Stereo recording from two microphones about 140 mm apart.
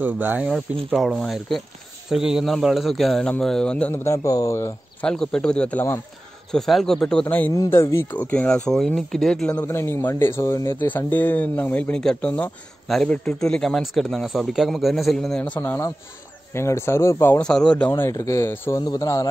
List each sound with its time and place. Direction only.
0.0 s speech: 10° right (ahead or behind)
0.9 s speech: centre (ahead or behind); by 4.7 s 20° left (ahead or behind)
5.0 s speech: 5° left (ahead or behind)
17.4 s speech: 5° left (ahead or behind); by 19.2 s 20° left (ahead or behind)